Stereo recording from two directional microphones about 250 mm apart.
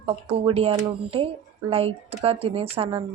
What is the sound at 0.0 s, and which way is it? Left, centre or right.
Speech, right.